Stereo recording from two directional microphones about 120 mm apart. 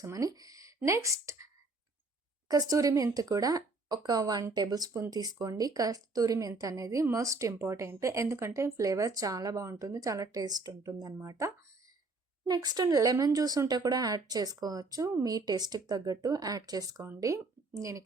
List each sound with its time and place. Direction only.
0.0 s speech: 30° right (ahead or behind)
2.5 s a woman's voice: 30° right (ahead or behind)